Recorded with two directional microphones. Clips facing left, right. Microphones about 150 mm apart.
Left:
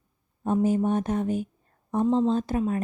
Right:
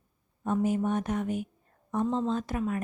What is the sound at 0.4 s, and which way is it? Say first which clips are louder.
A woman's voice: left 4 dB; 30° left (ahead or behind).